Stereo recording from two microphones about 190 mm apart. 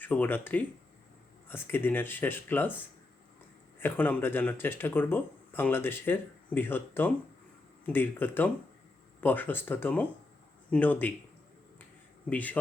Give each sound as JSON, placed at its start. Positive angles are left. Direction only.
{"t": 0.0, "sound": "speech", "side_deg": 10}
{"t": 12.3, "sound": "speech", "side_deg": 10}